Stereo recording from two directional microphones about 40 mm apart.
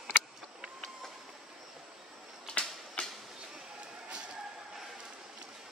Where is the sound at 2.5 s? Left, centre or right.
Left.